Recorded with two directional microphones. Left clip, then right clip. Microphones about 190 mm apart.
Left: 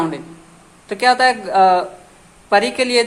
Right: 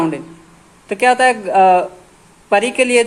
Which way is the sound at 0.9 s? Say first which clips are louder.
Right 1 dB; 25° right (ahead or behind).